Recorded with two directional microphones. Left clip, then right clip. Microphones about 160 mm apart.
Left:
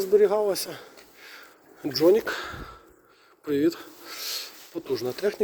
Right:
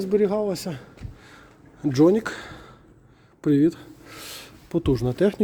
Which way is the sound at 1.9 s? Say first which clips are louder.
Right 1 dB; 10° right (ahead or behind).